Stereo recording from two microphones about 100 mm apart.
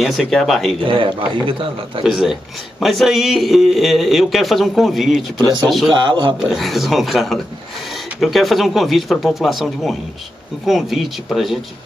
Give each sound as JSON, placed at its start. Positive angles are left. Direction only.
{"t": 0.0, "sound": "a man's voice", "side_deg": 0}
{"t": 0.8, "sound": "a man's voice", "side_deg": -55}
{"t": 2.0, "sound": "a man's voice", "side_deg": 0}
{"t": 5.9, "sound": "a man's voice", "side_deg": -50}
{"t": 6.4, "sound": "a man's voice", "side_deg": 0}